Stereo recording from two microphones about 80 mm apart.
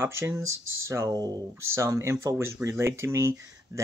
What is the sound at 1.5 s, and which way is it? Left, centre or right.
Speech, right.